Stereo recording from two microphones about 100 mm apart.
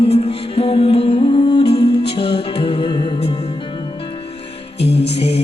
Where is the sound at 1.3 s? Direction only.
50° left (ahead or behind).